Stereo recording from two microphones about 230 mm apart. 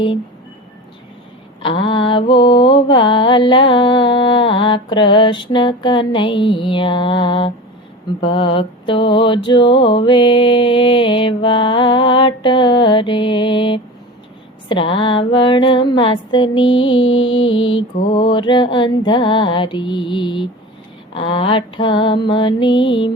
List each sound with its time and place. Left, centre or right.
1.6 s mantra: left
17.4 s mantra: left
17.7 s mantra: centre